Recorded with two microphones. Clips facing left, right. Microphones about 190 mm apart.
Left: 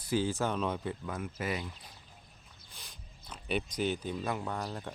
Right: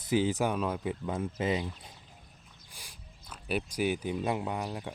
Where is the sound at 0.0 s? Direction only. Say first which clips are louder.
Right 3 dB; 20° right (ahead or behind).